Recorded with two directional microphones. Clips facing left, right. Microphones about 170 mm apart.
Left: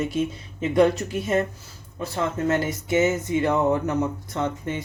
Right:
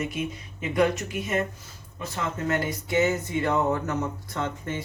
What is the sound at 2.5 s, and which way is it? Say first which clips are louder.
Speech: left 1 dB; 25° left (ahead or behind).